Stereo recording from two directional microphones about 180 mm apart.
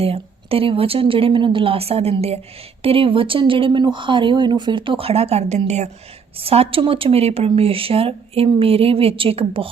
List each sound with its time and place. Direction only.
0.0 s speech: 30° right (ahead or behind)